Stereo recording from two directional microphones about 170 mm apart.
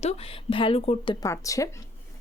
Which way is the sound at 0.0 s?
35° left (ahead or behind).